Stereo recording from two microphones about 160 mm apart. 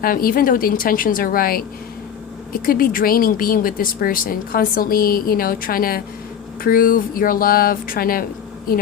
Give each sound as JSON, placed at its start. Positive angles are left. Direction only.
{"t": 0.0, "sound": "speech", "side_deg": 65}